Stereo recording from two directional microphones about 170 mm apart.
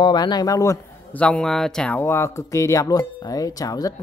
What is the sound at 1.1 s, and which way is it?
Speech, 5° left (ahead or behind).